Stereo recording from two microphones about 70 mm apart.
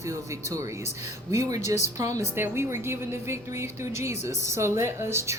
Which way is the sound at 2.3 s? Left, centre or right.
Right.